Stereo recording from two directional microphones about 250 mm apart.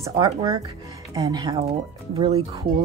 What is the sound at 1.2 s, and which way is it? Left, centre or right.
Speech, centre.